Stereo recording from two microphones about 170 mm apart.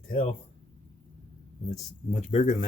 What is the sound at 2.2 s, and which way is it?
Speech, 40° left (ahead or behind).